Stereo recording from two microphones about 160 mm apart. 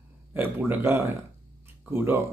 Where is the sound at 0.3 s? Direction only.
10° right (ahead or behind).